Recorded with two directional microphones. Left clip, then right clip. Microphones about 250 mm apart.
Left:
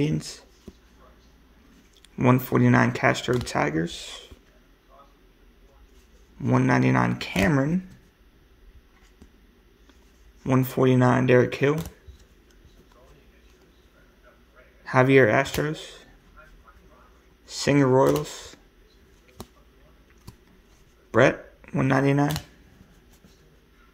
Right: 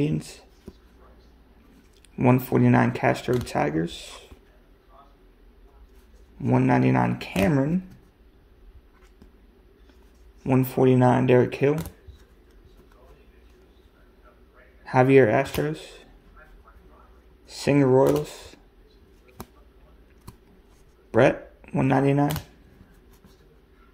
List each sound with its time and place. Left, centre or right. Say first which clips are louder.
0.0 s speech: even; centre
2.1 s speech: even; centre
6.4 s speech: even; centre
10.4 s speech: right 1 dB; centre
14.9 s speech: even; centre
17.5 s speech: even; centre
21.1 s speech: even; centre